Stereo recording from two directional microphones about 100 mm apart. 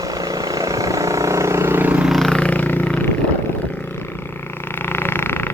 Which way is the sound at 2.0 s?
Centre (ahead or behind).